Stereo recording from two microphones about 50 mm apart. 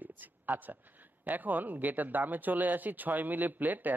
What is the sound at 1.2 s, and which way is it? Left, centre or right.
Speech, right.